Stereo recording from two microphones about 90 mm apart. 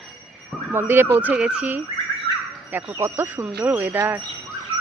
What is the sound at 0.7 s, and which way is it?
A woman's voice, 25° right (ahead or behind).